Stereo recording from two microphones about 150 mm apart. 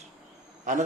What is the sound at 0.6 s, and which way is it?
Speech, 60° right (ahead or behind).